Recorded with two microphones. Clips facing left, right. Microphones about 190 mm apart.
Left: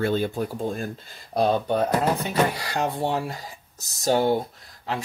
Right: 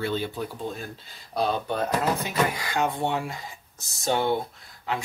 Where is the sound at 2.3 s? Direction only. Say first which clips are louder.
Left 3 dB; 35° left (ahead or behind).